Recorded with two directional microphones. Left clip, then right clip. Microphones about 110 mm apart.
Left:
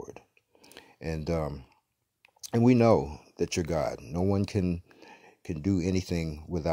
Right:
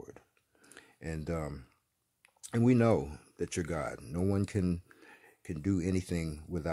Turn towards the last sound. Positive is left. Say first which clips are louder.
# left 4 dB
turn(degrees=5)  # may be behind; listen again after turning